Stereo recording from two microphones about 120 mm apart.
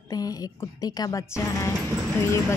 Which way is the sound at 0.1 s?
30° left (ahead or behind).